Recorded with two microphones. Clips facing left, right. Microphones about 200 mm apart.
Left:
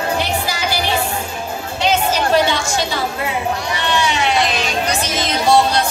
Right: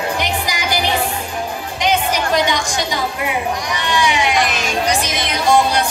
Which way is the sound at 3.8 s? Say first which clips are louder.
Right 1 dB; 15° right (ahead or behind).